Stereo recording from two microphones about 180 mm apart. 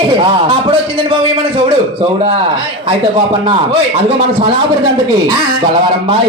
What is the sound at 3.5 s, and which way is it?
A man's voice, 35° right (ahead or behind).